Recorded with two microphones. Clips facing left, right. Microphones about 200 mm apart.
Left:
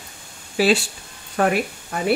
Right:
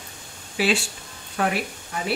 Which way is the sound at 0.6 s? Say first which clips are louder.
Left 5 dB; 40° left (ahead or behind).